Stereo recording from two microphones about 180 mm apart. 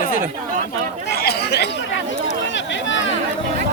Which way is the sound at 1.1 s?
60° left (ahead or behind).